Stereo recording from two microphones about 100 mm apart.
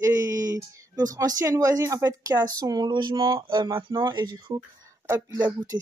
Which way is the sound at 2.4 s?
40° right (ahead or behind).